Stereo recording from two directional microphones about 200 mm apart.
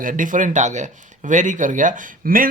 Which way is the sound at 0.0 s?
40° right (ahead or behind).